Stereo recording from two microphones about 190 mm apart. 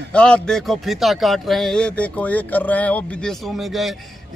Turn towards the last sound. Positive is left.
turn(degrees=0)  # may be behind; listen again after turning